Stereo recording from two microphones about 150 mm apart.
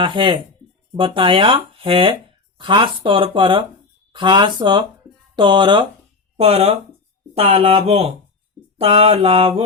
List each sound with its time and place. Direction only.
0.0 s speech: 35° right (ahead or behind)
6.3 s speech: 45° right (ahead or behind)